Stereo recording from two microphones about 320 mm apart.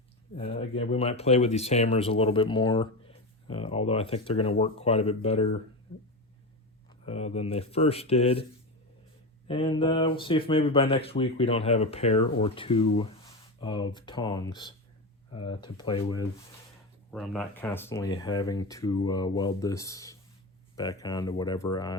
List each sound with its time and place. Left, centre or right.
0.3 s speech: centre
7.0 s speech: centre
9.5 s speech: centre
17.1 s speech: centre